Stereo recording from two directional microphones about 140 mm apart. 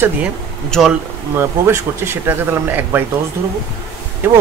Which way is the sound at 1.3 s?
20° right (ahead or behind).